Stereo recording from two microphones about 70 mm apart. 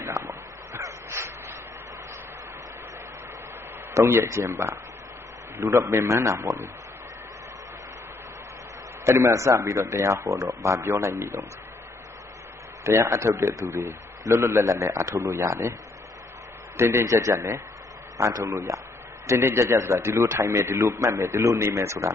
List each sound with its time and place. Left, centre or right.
0.0 s dog: right
4.1 s a man's voice: right
9.0 s a man's voice: right
12.8 s a man's voice: right
16.7 s a man's voice: right
17.0 s a man's voice: right
19.2 s a man's voice: right